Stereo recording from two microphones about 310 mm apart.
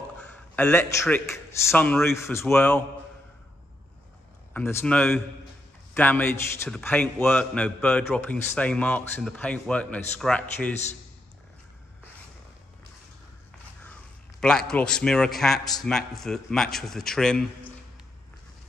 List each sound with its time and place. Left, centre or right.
0.2 s a man's voice: centre
4.6 s a man's voice: centre
14.4 s a man's voice: centre